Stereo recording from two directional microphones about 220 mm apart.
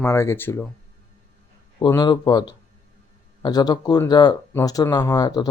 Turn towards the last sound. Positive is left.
turn(degrees=15)  # may be behind; listen again after turning